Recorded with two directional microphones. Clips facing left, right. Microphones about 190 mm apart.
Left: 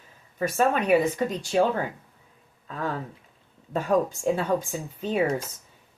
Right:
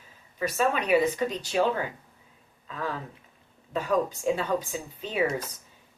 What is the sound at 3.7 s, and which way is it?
Speech, 50° left (ahead or behind).